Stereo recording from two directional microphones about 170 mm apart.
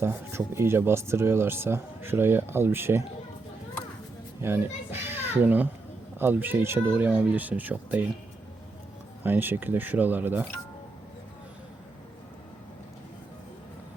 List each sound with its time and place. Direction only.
0.0 s speech: 15° right (ahead or behind)
4.4 s a child's voice: 15° right (ahead or behind)
9.2 s speech: 10° right (ahead or behind)